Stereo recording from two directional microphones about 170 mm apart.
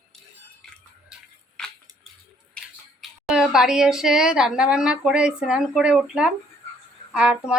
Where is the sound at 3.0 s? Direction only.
5° right (ahead or behind).